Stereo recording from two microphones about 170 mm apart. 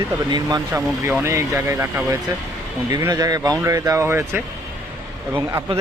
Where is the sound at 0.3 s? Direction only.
25° right (ahead or behind).